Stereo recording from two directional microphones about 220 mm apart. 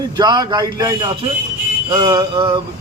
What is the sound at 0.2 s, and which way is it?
A man's voice, 20° right (ahead or behind).